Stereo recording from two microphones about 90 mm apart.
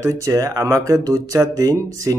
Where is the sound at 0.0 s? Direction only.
40° right (ahead or behind).